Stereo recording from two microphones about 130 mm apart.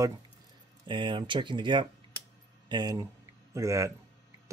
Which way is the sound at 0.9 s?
40° right (ahead or behind).